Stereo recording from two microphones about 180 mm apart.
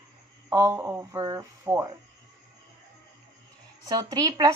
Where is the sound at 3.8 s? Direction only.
20° right (ahead or behind).